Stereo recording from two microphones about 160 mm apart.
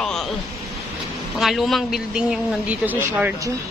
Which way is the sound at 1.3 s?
Centre (ahead or behind).